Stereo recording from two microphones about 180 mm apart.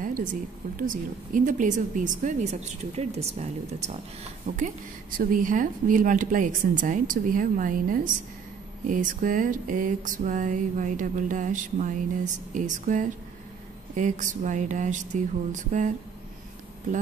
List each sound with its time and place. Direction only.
0.7 s a woman's voice: 50° right (ahead or behind)